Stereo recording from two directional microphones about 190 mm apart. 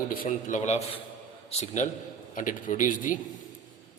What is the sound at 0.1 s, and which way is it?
A man's voice, 45° left (ahead or behind).